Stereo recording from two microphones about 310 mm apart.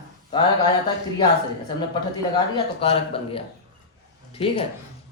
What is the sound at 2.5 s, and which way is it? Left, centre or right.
Speech, centre.